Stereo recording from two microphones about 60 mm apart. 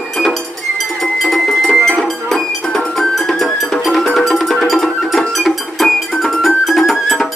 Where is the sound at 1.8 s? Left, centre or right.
Centre.